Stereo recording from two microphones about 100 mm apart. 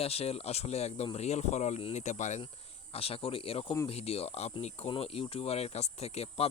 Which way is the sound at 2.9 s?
75° left (ahead or behind).